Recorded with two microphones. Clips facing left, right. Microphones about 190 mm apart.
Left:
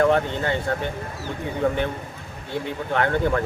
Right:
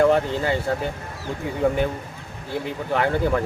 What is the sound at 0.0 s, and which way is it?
Speech, 5° right (ahead or behind).